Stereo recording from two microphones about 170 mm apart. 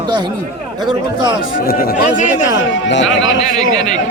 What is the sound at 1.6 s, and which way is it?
Speech, 60° left (ahead or behind).